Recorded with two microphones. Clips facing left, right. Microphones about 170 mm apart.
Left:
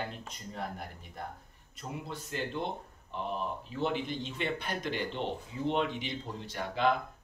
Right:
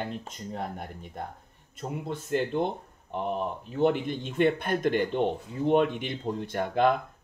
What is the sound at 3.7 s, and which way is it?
Speech, 50° right (ahead or behind).